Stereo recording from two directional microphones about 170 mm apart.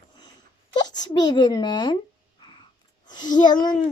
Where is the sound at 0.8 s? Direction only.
25° left (ahead or behind).